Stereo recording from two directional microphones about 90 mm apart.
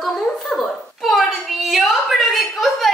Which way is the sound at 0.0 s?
Centre (ahead or behind).